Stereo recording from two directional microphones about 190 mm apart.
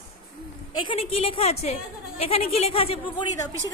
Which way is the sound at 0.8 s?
30° left (ahead or behind).